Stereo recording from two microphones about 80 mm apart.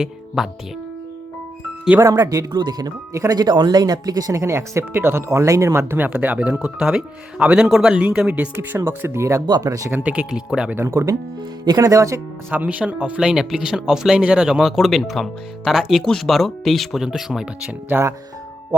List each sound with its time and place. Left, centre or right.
0.4 s speech: centre
2.0 s speech: right
2.5 s speech: right
6.1 s speech: centre
8.8 s speech: right
9.5 s speech: right
9.9 s speech: centre
10.8 s speech: right
12.5 s speech: right
17.8 s speech: right